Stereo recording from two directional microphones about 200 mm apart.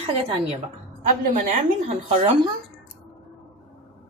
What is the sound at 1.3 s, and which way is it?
A woman's voice, 40° right (ahead or behind).